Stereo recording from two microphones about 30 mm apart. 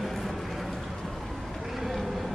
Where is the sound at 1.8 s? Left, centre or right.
Centre.